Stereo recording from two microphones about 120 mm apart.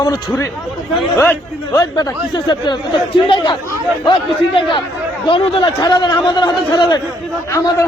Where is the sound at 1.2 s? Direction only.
15° left (ahead or behind).